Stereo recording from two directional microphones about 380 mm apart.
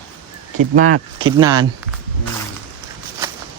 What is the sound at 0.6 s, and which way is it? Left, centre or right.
Speech, right.